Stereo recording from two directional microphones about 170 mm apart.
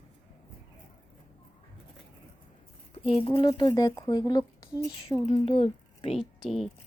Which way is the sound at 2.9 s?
35° left (ahead or behind).